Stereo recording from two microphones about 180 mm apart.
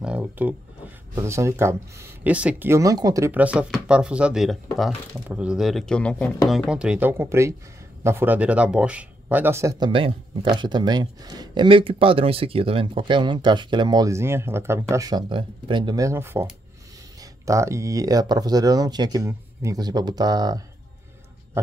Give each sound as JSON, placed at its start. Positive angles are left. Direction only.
{"t": 0.0, "sound": "speech", "side_deg": -5}